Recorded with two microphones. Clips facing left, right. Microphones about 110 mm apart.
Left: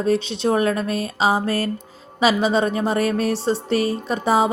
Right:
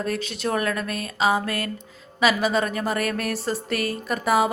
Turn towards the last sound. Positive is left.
turn(degrees=25)  # may be behind; listen again after turning